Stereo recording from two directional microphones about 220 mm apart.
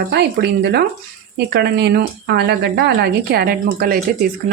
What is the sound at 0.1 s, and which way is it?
Speech, 50° right (ahead or behind).